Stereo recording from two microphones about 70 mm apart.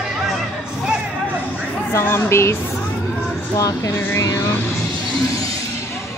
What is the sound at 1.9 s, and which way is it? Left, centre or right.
Speech, left.